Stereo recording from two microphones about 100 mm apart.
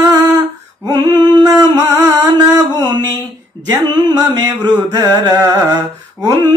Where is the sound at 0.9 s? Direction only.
45° right (ahead or behind).